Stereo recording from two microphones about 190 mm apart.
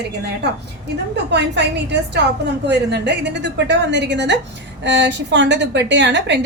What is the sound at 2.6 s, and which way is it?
A woman's voice, 65° right (ahead or behind).